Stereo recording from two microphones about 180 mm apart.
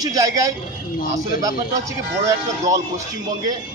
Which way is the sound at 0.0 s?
20° right (ahead or behind).